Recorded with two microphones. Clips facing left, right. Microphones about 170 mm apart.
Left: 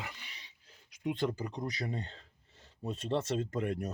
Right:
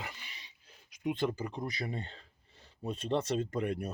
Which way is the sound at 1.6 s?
10° right (ahead or behind).